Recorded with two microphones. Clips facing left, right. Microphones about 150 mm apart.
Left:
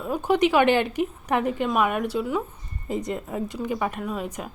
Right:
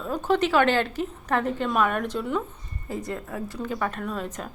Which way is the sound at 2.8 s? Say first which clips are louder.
Left 3 dB; 20° left (ahead or behind).